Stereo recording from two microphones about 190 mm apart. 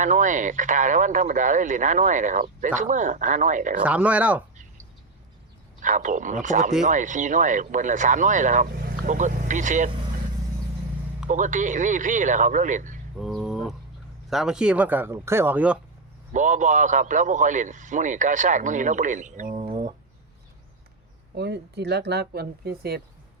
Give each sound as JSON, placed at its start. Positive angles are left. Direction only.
{"t": 0.0, "sound": "speech", "side_deg": -40}
{"t": 3.8, "sound": "speech", "side_deg": -5}
{"t": 5.8, "sound": "speech", "side_deg": -40}
{"t": 11.3, "sound": "speech", "side_deg": -40}
{"t": 13.1, "sound": "a sound", "side_deg": 0}
{"t": 14.3, "sound": "speech", "side_deg": 0}
{"t": 16.3, "sound": "speech", "side_deg": -40}
{"t": 19.5, "sound": "a sound", "side_deg": -25}
{"t": 21.3, "sound": "speech", "side_deg": -60}